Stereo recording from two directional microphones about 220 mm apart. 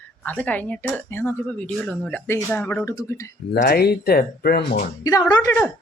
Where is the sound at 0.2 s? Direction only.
5° left (ahead or behind).